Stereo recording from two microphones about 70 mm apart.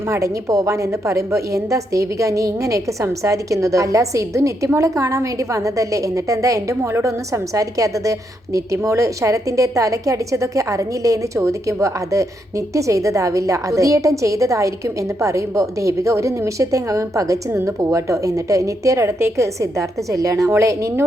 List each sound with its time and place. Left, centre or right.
0.1 s a woman's voice: right